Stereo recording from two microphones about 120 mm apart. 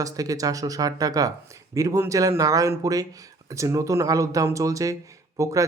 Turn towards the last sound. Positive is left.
turn(degrees=-25)  # may be behind; listen again after turning